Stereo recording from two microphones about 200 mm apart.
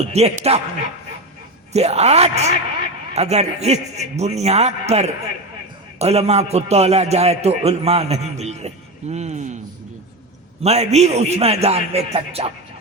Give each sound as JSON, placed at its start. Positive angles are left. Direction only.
{"t": 0.0, "sound": "a man's voice", "side_deg": -30}
{"t": 1.7, "sound": "a man's voice", "side_deg": -35}
{"t": 10.6, "sound": "a man's voice", "side_deg": -35}